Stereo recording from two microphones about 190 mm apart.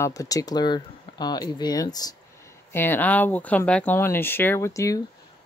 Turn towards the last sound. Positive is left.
turn(degrees=15)  # may be behind; listen again after turning